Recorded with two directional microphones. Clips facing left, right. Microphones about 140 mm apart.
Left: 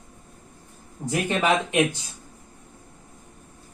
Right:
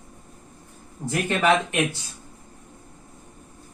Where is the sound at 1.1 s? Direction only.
15° left (ahead or behind).